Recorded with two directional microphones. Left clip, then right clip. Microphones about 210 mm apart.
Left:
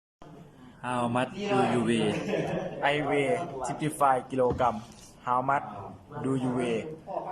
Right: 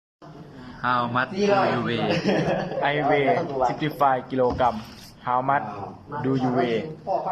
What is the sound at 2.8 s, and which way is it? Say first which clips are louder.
Speech: right 5 dB; centre (ahead or behind).